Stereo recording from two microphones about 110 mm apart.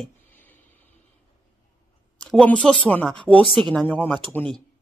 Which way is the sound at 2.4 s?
10° left (ahead or behind).